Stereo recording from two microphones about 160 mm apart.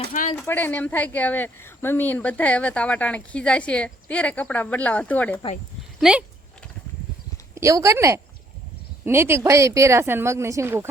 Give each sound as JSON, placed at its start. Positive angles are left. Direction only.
{"t": 0.1, "sound": "speech", "side_deg": 55}
{"t": 0.4, "sound": "speech", "side_deg": 10}
{"t": 6.0, "sound": "speech", "side_deg": -5}
{"t": 7.5, "sound": "speech", "side_deg": -20}